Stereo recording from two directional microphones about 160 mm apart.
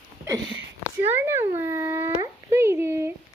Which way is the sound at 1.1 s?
15° right (ahead or behind).